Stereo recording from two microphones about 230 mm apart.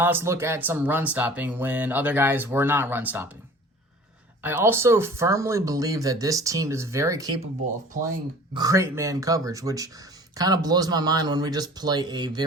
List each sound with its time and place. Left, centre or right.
0.0 s speech: centre
4.4 s speech: centre
8.5 s speech: centre